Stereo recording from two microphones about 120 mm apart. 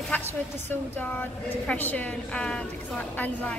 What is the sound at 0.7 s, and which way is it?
A woman's voice, 15° left (ahead or behind).